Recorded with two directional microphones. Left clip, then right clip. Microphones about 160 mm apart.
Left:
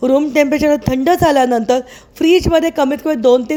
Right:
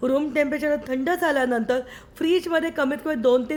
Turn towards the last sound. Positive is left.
turn(degrees=30)  # may be behind; listen again after turning